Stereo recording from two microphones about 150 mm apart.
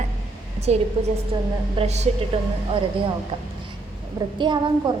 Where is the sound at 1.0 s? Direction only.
40° right (ahead or behind).